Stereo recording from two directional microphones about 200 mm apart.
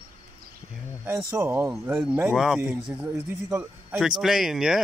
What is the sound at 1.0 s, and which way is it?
A man's voice, 10° right (ahead or behind).